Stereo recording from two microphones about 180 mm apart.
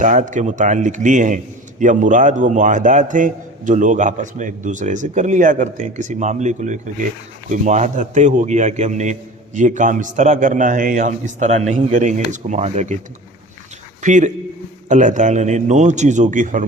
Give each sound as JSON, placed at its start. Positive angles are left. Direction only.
{"t": 0.0, "sound": "a man's voice", "side_deg": -45}
{"t": 14.0, "sound": "a man's voice", "side_deg": -45}